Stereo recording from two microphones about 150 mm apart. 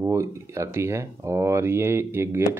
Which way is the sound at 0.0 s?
20° right (ahead or behind).